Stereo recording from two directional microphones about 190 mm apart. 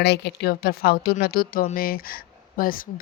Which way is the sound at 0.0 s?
60° left (ahead or behind).